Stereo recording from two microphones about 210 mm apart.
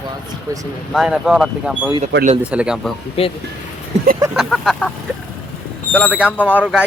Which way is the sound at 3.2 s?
30° left (ahead or behind).